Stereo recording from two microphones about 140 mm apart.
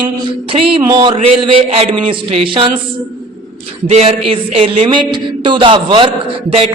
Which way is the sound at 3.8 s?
50° right (ahead or behind).